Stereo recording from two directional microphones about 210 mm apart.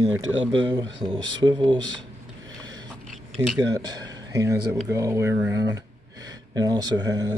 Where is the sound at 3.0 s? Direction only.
Centre (ahead or behind).